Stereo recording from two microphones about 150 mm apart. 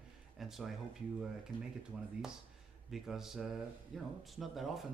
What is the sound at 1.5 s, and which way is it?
Speech, 30° left (ahead or behind).